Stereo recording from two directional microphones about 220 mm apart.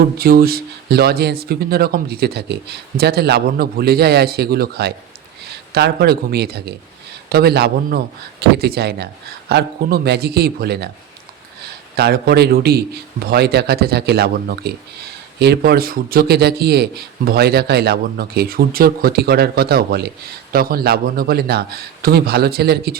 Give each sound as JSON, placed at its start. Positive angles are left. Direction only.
{"t": 0.2, "sound": "a man's voice", "side_deg": -45}
{"t": 11.9, "sound": "a man's voice", "side_deg": -45}